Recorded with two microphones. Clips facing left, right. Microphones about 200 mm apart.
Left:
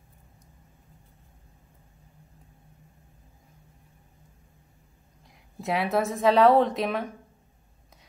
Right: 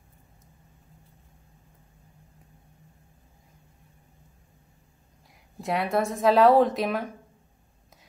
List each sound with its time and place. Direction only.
5.6 s speech: centre (ahead or behind)